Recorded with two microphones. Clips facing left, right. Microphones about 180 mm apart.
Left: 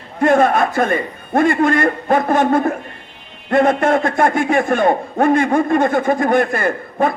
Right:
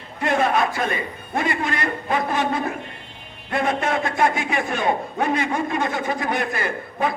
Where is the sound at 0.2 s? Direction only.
50° left (ahead or behind).